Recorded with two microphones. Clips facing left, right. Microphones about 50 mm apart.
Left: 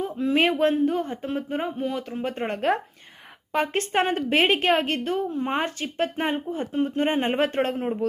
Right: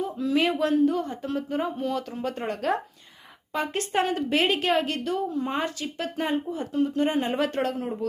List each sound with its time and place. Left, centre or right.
0.0 s a woman's voice: left